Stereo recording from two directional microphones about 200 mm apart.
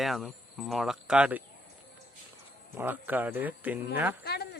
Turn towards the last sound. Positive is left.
turn(degrees=55)  # may be behind; listen again after turning